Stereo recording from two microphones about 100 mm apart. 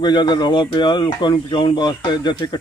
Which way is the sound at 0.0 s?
50° left (ahead or behind).